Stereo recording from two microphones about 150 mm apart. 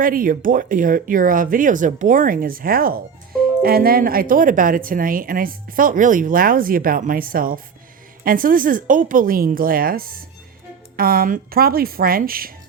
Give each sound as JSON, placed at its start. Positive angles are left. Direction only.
{"t": 0.0, "sound": "a woman's voice", "side_deg": -70}